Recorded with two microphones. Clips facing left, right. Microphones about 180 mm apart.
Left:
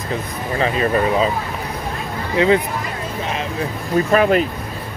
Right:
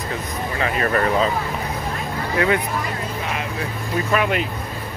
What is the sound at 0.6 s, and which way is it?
Speech, 25° left (ahead or behind).